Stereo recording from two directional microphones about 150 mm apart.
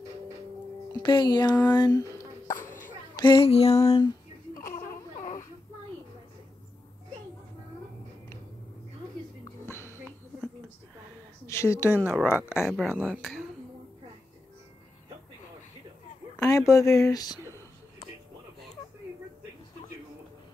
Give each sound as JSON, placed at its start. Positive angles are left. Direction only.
{"t": 1.0, "sound": "speech", "side_deg": 30}
{"t": 1.8, "sound": "a sound", "side_deg": 20}
{"t": 3.2, "sound": "a sound", "side_deg": 30}
{"t": 3.7, "sound": "speech", "side_deg": 25}
{"t": 4.7, "sound": "baby cry", "side_deg": 65}
{"t": 9.4, "sound": "music", "side_deg": 15}
{"t": 11.4, "sound": "a sound", "side_deg": 20}
{"t": 11.9, "sound": "speech", "side_deg": -10}
{"t": 16.4, "sound": "speech", "side_deg": 20}